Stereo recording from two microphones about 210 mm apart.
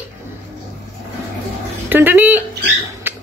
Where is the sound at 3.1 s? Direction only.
10° right (ahead or behind).